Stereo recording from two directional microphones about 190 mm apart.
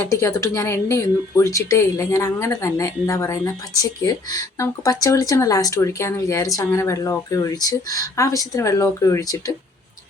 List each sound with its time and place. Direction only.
0.1 s speech: 15° left (ahead or behind)